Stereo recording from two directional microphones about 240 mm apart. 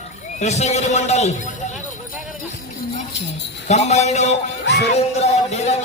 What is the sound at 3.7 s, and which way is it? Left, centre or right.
Speech, left.